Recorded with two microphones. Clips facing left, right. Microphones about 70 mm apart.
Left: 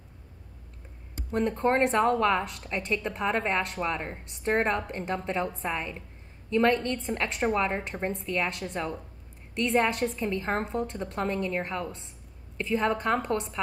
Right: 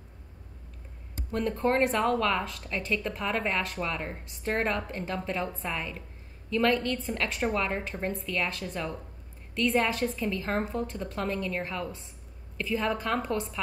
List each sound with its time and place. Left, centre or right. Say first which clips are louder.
1.3 s a woman's voice: left 2 dB; centre